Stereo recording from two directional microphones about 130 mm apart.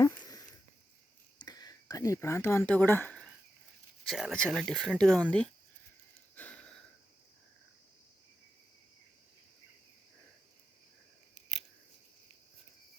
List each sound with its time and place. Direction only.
0.0 s a sound: 25° left (ahead or behind)
1.4 s speech: 30° left (ahead or behind)
4.0 s speech: centre (ahead or behind)
6.3 s wheeze: 10° left (ahead or behind)